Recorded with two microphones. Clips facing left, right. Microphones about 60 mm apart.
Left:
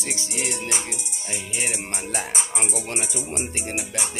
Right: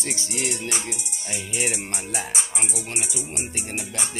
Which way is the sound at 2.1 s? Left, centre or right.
Left.